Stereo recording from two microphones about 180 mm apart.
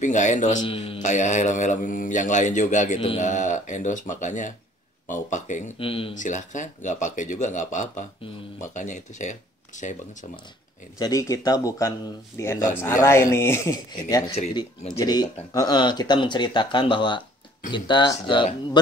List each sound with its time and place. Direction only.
0.0 s speech: 45° left (ahead or behind)
0.7 s speech: 35° left (ahead or behind)
5.8 s speech: 30° left (ahead or behind)
6.1 s speech: 45° left (ahead or behind)
11.0 s speech: 20° left (ahead or behind)